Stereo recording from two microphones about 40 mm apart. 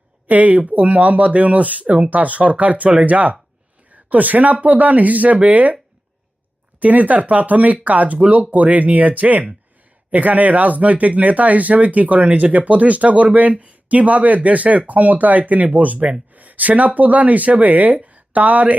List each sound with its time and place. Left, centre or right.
0.3 s speech: right
3.8 s a sound: right
4.5 s speech: right
6.7 s speech: right